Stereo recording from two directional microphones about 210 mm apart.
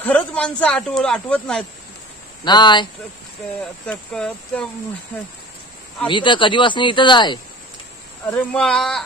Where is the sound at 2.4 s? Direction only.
20° left (ahead or behind).